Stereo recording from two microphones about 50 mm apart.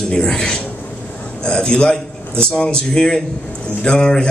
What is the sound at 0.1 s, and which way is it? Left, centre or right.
Speech, centre.